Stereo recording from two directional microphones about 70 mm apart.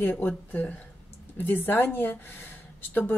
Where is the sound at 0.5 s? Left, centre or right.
Centre.